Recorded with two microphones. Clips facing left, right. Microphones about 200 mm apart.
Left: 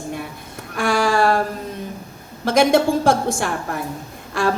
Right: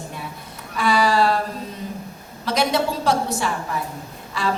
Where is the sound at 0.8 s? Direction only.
50° left (ahead or behind).